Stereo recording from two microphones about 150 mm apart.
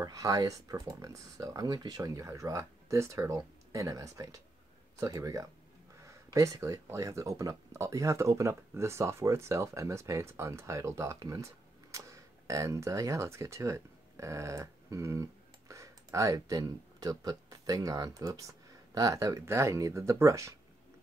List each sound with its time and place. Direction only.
0.0 s speech: 20° right (ahead or behind)